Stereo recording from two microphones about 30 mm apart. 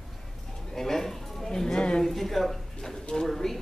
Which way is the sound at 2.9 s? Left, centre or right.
Centre.